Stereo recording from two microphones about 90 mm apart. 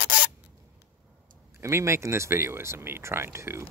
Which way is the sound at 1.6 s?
30° right (ahead or behind).